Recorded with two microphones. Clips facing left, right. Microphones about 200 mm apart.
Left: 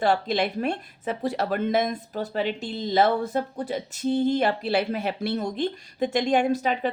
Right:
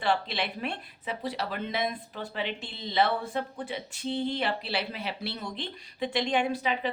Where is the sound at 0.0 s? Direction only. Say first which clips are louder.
Left 6 dB; 45° left (ahead or behind).